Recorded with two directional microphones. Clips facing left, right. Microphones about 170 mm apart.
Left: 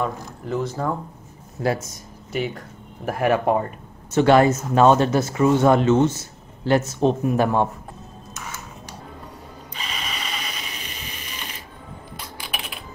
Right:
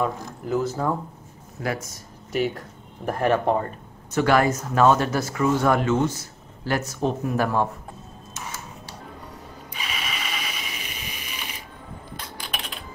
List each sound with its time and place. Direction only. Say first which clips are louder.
0.0 s speech: even; 5° right (ahead or behind)
1.6 s speech: left 5 dB; 25° left (ahead or behind)
2.3 s speech: right 2 dB; centre (ahead or behind)
3.1 s speech: left 2 dB; 10° left (ahead or behind)
4.1 s speech: left 4 dB; 25° left (ahead or behind)
9.8 s a sound: even; 5° right (ahead or behind)
12.2 s typing: left 1 dB; 10° left (ahead or behind)